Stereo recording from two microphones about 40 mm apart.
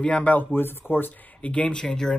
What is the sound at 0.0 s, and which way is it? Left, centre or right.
Speech, left.